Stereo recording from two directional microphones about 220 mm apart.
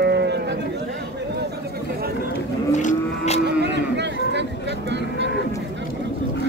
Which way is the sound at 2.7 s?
30° left (ahead or behind).